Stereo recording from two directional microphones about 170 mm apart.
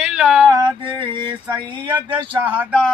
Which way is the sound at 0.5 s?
25° right (ahead or behind).